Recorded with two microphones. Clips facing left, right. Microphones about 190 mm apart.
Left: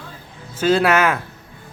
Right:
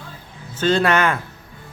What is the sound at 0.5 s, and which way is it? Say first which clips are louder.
Speech: left 2 dB; 10° left (ahead or behind).